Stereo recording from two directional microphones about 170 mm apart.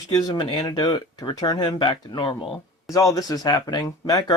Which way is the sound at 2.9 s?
20° left (ahead or behind).